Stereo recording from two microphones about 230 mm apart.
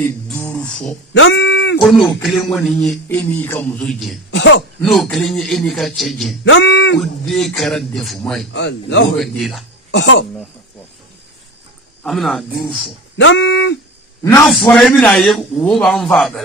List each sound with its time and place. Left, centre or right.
0.0 s music: centre
1.1 s a sound: left
1.8 s a man's voice: centre
4.3 s speech: left
4.8 s a man's voice: centre
6.4 s speech: left
7.0 s a man's voice: centre
8.5 s a man's voice: left
9.2 s a man's voice: centre
9.8 s speech: left
12.0 s speech: centre
13.2 s speech: left
14.4 s a man's voice: centre